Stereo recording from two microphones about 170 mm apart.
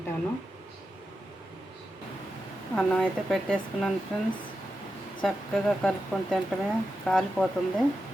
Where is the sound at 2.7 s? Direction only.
Centre (ahead or behind).